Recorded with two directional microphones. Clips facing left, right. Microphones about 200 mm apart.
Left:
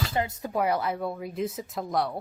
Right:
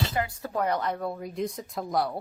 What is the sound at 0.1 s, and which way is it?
Speech, 25° left (ahead or behind).